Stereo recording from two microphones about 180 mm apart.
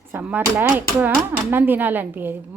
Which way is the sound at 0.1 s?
10° right (ahead or behind).